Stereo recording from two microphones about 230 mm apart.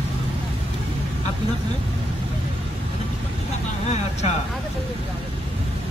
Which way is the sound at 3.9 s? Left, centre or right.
Left.